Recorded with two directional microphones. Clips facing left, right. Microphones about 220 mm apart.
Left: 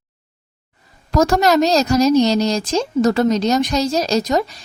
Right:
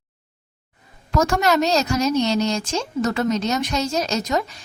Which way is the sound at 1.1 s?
35° left (ahead or behind).